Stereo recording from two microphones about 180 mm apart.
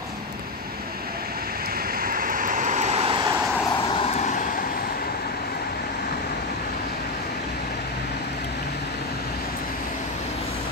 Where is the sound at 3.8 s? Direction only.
30° left (ahead or behind); by 4.6 s 45° left (ahead or behind).